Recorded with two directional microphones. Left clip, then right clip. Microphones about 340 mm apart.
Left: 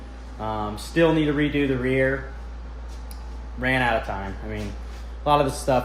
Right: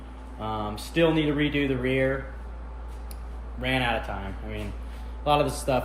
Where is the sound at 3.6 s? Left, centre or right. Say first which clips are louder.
Left 4 dB; centre.